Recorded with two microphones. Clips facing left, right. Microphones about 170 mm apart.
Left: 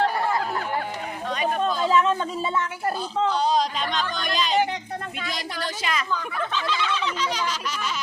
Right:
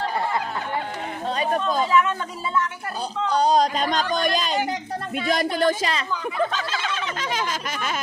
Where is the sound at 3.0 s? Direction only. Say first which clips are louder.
Right 3 dB; 40° right (ahead or behind).